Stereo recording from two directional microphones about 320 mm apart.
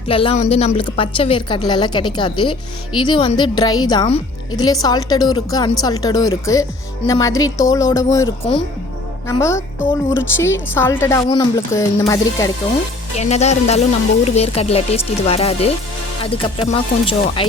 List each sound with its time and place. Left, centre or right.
0.1 s a woman's voice: centre